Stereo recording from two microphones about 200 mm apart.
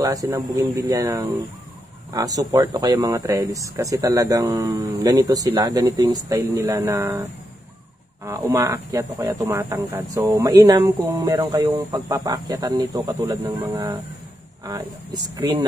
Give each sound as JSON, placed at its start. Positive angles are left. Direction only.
{"t": 0.0, "sound": "speech", "side_deg": -15}
{"t": 8.3, "sound": "speech", "side_deg": -15}